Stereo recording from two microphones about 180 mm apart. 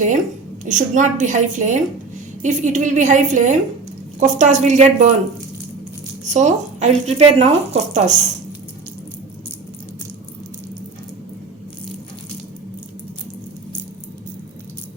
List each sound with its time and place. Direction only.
0.6 s a woman's voice: 45° right (ahead or behind)
6.2 s speech: 40° right (ahead or behind)